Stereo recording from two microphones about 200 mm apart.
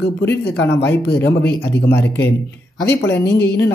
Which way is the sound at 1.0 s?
55° left (ahead or behind).